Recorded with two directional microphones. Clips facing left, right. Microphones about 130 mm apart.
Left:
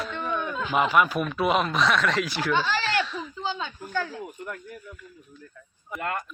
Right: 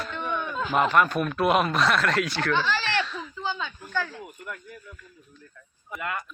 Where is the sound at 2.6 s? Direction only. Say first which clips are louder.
Left 2 dB; 15° left (ahead or behind).